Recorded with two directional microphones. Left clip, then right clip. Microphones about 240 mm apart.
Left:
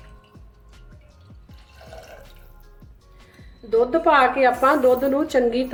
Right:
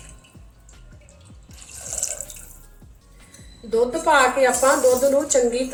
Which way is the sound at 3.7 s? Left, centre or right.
Left.